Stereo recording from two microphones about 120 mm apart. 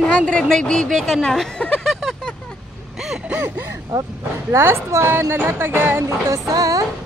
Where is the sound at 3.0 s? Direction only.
5° right (ahead or behind).